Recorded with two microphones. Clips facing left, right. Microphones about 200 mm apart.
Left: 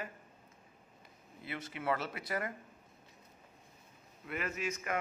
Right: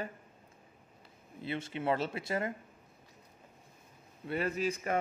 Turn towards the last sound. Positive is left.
turn(degrees=-35)  # may be behind; listen again after turning